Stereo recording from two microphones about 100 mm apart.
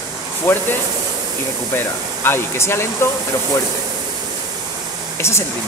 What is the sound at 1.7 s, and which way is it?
Speech, 25° left (ahead or behind).